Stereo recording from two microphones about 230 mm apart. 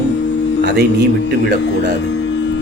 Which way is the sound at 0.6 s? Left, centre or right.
Right.